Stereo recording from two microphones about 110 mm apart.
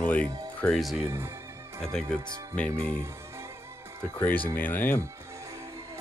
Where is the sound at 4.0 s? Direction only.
15° left (ahead or behind).